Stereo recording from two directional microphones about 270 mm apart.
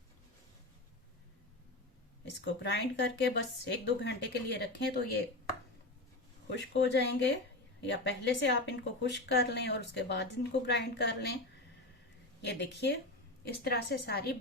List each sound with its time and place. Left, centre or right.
2.4 s a woman's voice: left
6.5 s a woman's voice: left
12.4 s a woman's voice: left